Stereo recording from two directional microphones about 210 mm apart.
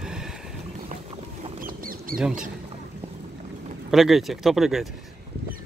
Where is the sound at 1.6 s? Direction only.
40° right (ahead or behind).